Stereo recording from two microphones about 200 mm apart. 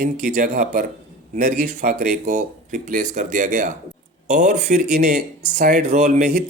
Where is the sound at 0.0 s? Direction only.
45° right (ahead or behind).